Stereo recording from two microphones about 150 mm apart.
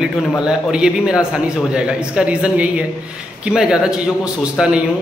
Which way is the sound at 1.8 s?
5° right (ahead or behind).